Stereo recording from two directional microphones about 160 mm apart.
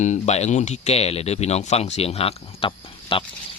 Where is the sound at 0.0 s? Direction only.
45° left (ahead or behind).